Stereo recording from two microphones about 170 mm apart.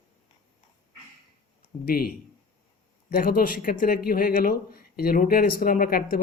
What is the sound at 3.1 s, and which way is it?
Speech, 60° left (ahead or behind).